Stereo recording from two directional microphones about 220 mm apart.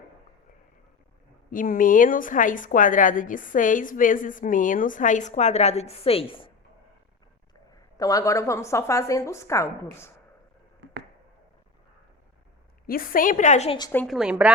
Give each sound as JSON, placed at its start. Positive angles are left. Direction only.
{"t": 1.5, "sound": "a woman's voice", "side_deg": 40}
{"t": 7.7, "sound": "a woman's voice", "side_deg": 15}
{"t": 12.9, "sound": "a woman's voice", "side_deg": 40}
{"t": 13.7, "sound": "a woman's voice", "side_deg": 15}
{"t": 14.0, "sound": "a woman's voice", "side_deg": 0}